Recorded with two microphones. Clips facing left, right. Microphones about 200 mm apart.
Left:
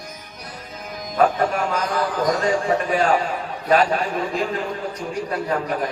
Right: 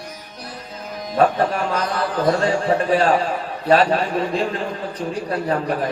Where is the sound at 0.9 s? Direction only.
30° right (ahead or behind).